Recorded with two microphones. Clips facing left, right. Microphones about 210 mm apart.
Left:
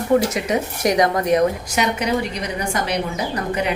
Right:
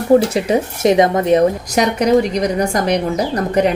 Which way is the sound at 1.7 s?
40° right (ahead or behind).